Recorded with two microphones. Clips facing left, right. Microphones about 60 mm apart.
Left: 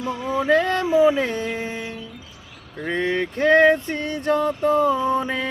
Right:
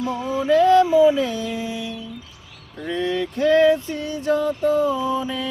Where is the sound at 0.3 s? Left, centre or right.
Left.